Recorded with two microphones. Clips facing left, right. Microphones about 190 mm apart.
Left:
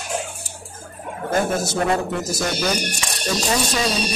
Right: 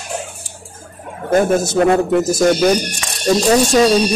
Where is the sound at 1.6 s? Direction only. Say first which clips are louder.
Right 7 dB; 50° right (ahead or behind).